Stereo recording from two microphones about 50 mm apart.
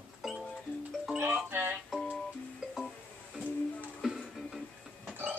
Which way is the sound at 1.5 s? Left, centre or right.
Right.